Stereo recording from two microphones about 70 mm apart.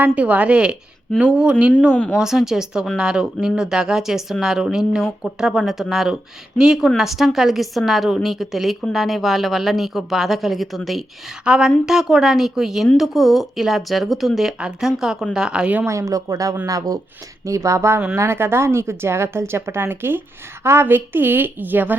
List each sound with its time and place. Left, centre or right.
0.0 s a woman's voice: centre
15.9 s a woman's voice: right